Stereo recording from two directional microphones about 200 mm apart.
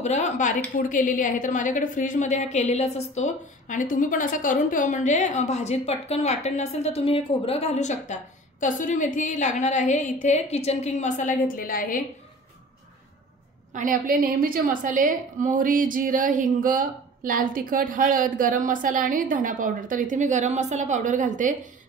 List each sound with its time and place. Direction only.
0.0 s a woman's voice: 35° left (ahead or behind)
13.7 s a woman's voice: 45° right (ahead or behind)